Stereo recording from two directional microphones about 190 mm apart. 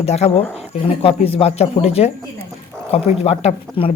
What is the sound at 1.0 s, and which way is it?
Speech, 30° left (ahead or behind).